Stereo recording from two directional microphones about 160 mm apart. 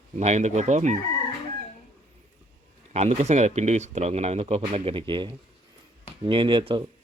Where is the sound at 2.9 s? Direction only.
45° right (ahead or behind).